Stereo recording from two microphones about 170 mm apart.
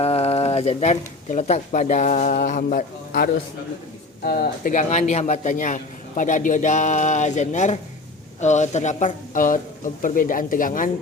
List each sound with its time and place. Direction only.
0.0 s a man's voice: 35° left (ahead or behind); by 10.9 s 50° left (ahead or behind)